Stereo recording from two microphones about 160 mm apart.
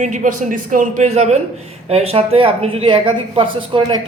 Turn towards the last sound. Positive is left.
turn(degrees=-30)  # may be behind; listen again after turning